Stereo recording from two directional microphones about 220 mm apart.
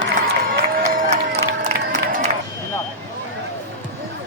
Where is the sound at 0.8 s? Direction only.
35° right (ahead or behind).